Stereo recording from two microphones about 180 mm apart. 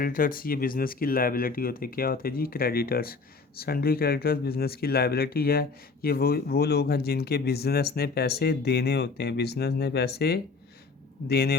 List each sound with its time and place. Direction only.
0.0 s speech: 50° left (ahead or behind)